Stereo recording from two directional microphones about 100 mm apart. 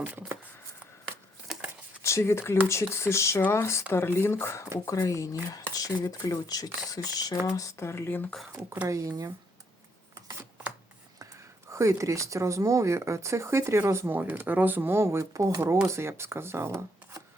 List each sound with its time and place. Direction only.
0.0 s speech: 15° right (ahead or behind)
2.0 s speech: 30° left (ahead or behind)
8.9 s speech: 35° right (ahead or behind)
11.7 s speech: 30° right (ahead or behind)